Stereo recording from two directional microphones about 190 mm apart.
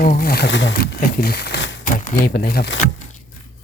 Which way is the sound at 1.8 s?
45° left (ahead or behind).